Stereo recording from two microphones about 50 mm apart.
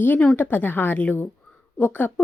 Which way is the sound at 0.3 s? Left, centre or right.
Left.